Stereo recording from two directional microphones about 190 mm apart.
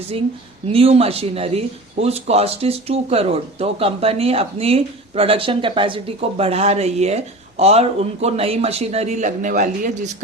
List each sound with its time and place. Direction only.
0.7 s speech: 30° right (ahead or behind)